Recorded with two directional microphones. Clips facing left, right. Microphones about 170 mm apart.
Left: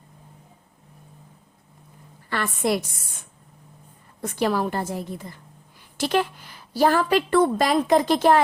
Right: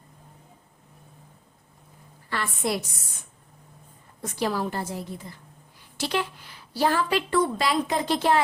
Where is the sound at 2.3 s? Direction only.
55° left (ahead or behind).